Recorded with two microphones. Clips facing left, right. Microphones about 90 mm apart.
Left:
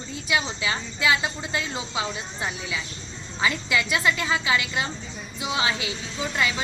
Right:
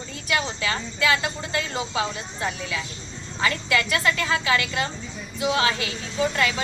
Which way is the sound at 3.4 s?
15° left (ahead or behind).